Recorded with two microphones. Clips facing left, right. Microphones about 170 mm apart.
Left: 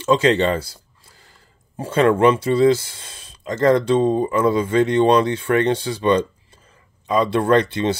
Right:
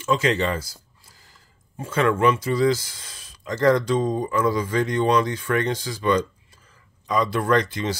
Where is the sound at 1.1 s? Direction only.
60° left (ahead or behind).